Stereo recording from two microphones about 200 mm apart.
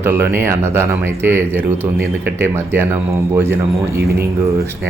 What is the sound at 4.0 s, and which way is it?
Speech, 50° right (ahead or behind).